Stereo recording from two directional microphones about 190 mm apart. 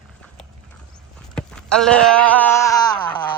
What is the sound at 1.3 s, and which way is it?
Speech, 5° left (ahead or behind).